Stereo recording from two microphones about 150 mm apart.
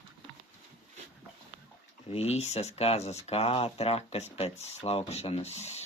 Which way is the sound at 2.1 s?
45° left (ahead or behind).